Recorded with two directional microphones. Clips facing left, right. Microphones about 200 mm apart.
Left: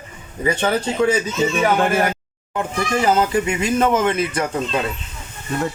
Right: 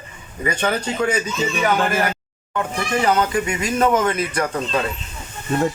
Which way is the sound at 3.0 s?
25° left (ahead or behind).